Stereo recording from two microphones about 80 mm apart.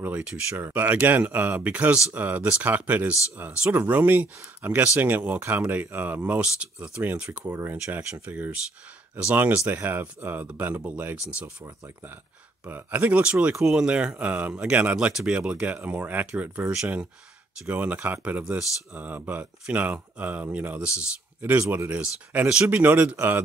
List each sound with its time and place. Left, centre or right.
0.6 s speech: right
12.6 s speech: right
21.5 s speech: right
22.3 s speech: centre